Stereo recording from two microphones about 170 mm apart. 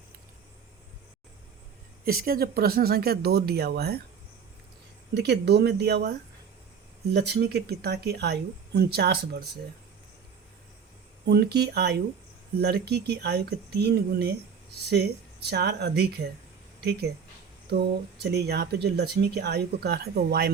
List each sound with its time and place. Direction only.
2.0 s speech: 60° right (ahead or behind)
5.1 s speech: 80° right
11.3 s speech: 70° right (ahead or behind)
15.4 s speech: 75° right (ahead or behind)
17.7 s speech: 75° right (ahead or behind)